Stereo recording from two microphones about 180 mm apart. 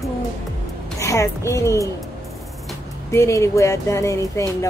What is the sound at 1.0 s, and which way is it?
Speech, 15° left (ahead or behind).